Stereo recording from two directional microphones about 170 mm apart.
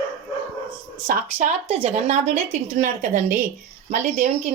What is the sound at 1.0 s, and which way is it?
A woman's voice, 45° right (ahead or behind).